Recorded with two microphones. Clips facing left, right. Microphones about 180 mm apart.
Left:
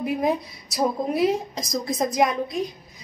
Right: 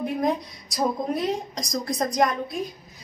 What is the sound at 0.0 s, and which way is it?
A woman's voice, 5° left (ahead or behind).